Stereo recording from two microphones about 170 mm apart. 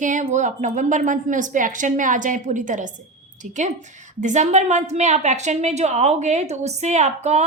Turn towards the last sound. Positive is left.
turn(degrees=-40)  # may be behind; listen again after turning